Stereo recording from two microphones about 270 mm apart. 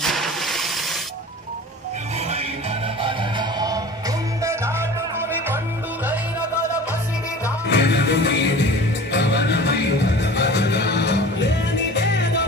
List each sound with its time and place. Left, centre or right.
0.0 s a sound: centre
3.0 s music: centre
7.7 s music: left